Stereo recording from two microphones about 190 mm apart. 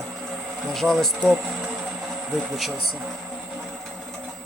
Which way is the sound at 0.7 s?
Centre (ahead or behind).